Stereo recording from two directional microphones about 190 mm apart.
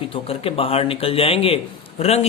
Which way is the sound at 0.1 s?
30° left (ahead or behind).